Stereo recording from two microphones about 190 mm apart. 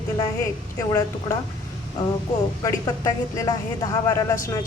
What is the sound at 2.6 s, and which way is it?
Speech, 20° left (ahead or behind).